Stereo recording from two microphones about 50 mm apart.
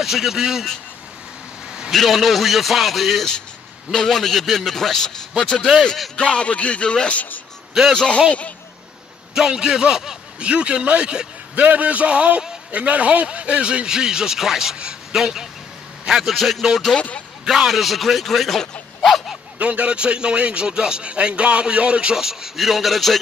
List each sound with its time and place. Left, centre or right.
0.0 s a man's voice: centre
1.9 s a man's voice: centre
6.1 s speech: left
8.3 s a man's voice: left
9.5 s a man's voice: centre
16.9 s speech: left
17.5 s speech: centre
19.6 s speech: right
22.1 s speech: centre